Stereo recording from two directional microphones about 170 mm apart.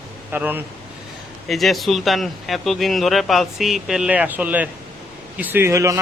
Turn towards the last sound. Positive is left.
turn(degrees=-20)  # may be behind; listen again after turning